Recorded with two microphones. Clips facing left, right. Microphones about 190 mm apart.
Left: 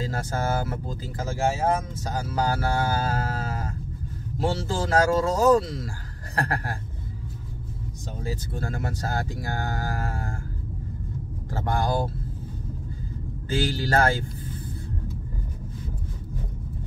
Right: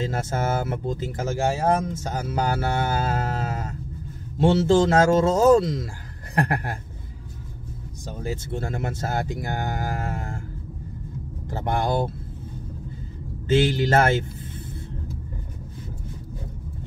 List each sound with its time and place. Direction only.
0.0 s speech: 25° right (ahead or behind)
8.3 s speech: 25° right (ahead or behind)
11.5 s speech: 20° right (ahead or behind)
13.5 s speech: 20° right (ahead or behind)